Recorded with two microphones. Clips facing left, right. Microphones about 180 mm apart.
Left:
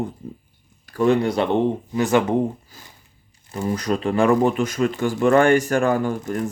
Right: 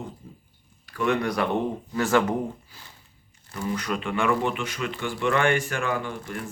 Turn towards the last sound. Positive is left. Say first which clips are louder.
# left 9 dB
turn(degrees=40)  # may be behind; listen again after turning